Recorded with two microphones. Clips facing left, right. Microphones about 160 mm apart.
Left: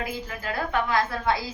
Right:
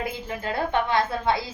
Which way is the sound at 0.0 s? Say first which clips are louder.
Right 2 dB; 25° right (ahead or behind).